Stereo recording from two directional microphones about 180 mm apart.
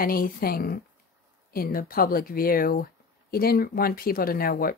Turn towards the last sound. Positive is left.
turn(degrees=55)  # may be behind; listen again after turning